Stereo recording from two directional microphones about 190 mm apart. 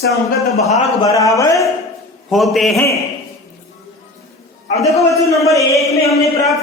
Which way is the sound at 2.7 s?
15° left (ahead or behind).